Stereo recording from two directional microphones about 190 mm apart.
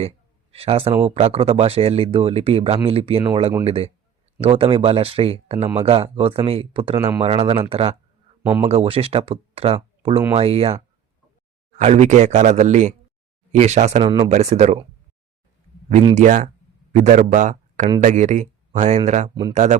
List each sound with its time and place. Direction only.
0.5 s speech: 30° right (ahead or behind)
16.1 s speech: 40° right (ahead or behind)
19.3 s speech: 25° right (ahead or behind)